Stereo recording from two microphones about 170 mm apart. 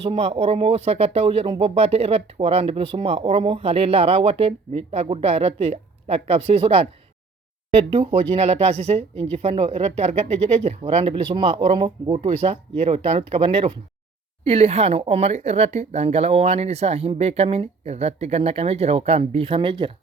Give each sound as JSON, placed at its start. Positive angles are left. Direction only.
{"t": 0.0, "sound": "speech", "side_deg": -35}
{"t": 9.0, "sound": "speech", "side_deg": 10}
{"t": 9.4, "sound": "speech", "side_deg": -35}